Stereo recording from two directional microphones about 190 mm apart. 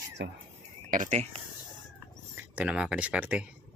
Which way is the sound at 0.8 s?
40° right (ahead or behind).